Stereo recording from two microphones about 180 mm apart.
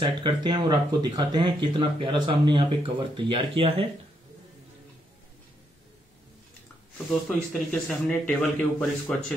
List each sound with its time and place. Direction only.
0.0 s speech: 25° right (ahead or behind)
7.1 s speech: centre (ahead or behind)